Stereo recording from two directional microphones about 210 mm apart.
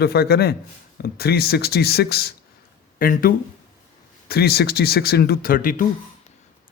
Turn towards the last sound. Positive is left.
turn(degrees=40)  # may be behind; listen again after turning